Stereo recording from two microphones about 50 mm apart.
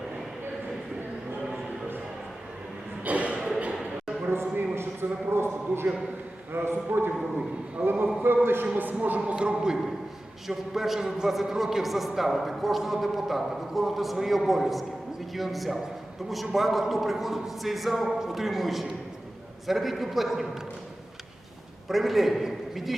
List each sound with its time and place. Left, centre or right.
3.0 s a sound: right
4.3 s a sound: right
6.5 s a man's voice: right
8.6 s speech: right; by 9.7 s centre
10.5 s a man's voice: centre
21.8 s a man's voice: centre